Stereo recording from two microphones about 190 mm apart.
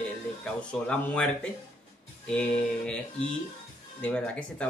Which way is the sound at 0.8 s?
5° left (ahead or behind).